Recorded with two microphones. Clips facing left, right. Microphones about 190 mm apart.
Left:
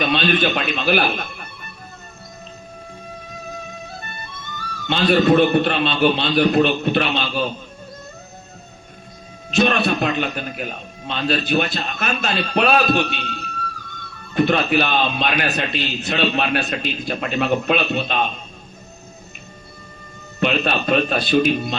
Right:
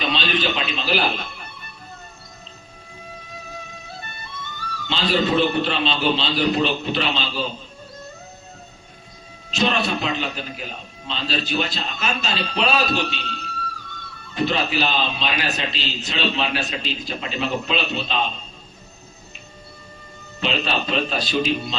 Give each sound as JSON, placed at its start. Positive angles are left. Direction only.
{"t": 0.0, "sound": "a man's voice", "side_deg": 55}
{"t": 4.9, "sound": "a man's voice", "side_deg": 55}
{"t": 9.5, "sound": "a man's voice", "side_deg": 55}
{"t": 20.4, "sound": "a man's voice", "side_deg": 55}